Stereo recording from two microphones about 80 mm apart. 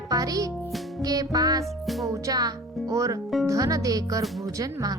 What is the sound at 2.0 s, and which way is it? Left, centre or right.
Speech, right.